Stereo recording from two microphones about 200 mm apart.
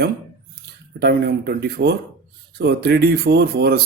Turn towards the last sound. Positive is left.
turn(degrees=-50)  # may be behind; listen again after turning